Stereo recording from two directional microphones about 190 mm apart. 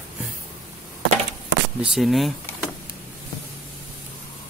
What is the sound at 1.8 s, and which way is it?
Speech, centre (ahead or behind).